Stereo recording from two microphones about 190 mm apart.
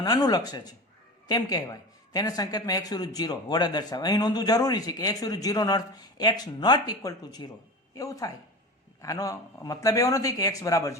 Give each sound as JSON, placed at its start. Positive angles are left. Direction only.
{"t": 0.0, "sound": "speech", "side_deg": 20}